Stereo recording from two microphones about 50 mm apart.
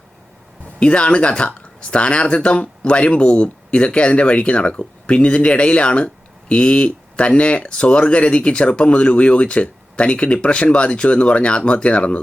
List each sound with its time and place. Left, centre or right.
0.8 s speech: left